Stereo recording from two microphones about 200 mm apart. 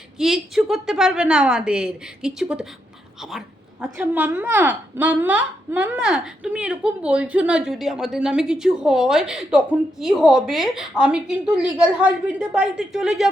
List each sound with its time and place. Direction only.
0.2 s a woman's voice: centre (ahead or behind)